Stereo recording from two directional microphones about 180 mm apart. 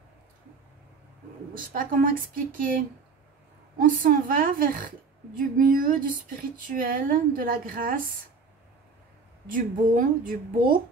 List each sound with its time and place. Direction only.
1.5 s a woman's voice: 50° right (ahead or behind)
3.7 s a woman's voice: 50° right (ahead or behind)
9.5 s a woman's voice: 50° right (ahead or behind)